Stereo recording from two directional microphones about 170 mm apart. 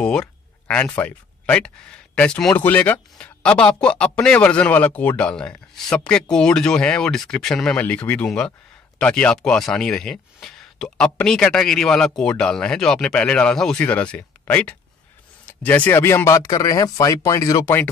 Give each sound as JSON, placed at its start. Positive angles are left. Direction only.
{"t": 0.0, "sound": "speech", "side_deg": 5}